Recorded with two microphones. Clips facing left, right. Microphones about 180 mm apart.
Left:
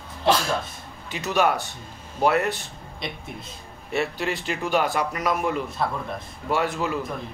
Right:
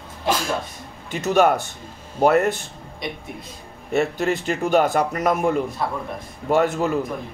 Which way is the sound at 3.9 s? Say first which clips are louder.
Right 5 dB; 45° right (ahead or behind).